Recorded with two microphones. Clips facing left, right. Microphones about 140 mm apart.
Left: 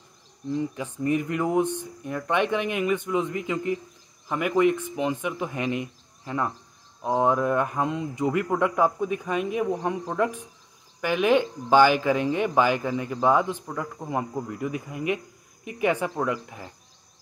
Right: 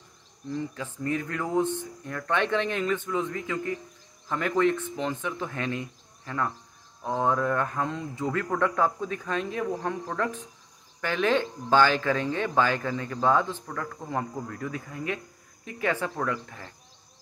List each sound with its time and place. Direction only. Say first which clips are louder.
0.5 s speech: left 4 dB; 15° left (ahead or behind)